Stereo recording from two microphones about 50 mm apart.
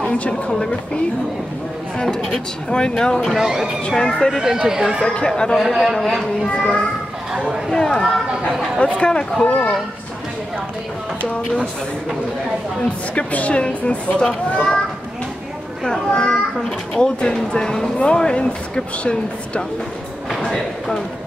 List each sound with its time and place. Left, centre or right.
0.3 s speech: centre
3.3 s speech: centre
3.9 s speech: centre
4.4 s speech: centre
5.1 s speech: centre
5.6 s a man's voice: centre
6.4 s a child's voice: centre
7.3 s chatter: centre
7.7 s a child's voice: centre
13.3 s a child's voice: left
16.1 s a child's voice: centre
20.2 s a sound: centre